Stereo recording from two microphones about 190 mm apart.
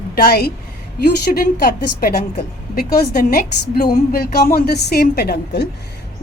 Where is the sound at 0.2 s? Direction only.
55° left (ahead or behind).